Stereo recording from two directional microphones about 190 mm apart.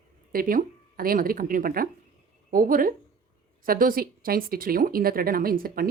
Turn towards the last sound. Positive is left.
turn(degrees=-50)  # may be behind; listen again after turning